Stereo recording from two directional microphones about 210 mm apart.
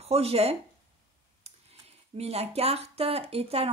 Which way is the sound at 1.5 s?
30° right (ahead or behind).